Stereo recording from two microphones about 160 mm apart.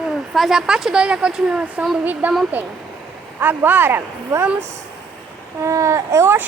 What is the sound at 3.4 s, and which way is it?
Speech, 15° right (ahead or behind).